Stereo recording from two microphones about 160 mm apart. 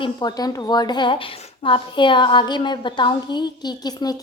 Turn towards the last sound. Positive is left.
turn(degrees=25)  # may be behind; listen again after turning